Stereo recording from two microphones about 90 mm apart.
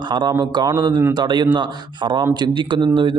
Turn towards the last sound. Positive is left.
turn(degrees=-60)  # may be behind; listen again after turning